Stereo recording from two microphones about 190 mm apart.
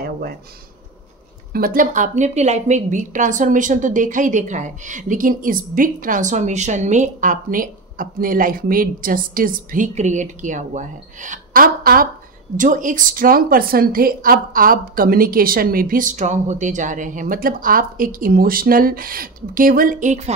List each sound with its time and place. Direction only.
1.5 s a woman's voice: 50° right (ahead or behind)